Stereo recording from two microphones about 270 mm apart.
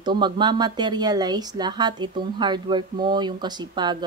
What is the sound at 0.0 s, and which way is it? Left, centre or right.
Speech, centre.